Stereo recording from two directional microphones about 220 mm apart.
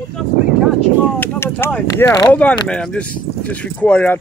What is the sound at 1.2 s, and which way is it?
Speech, 10° left (ahead or behind).